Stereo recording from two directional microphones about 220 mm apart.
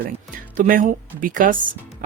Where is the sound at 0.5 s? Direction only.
35° right (ahead or behind).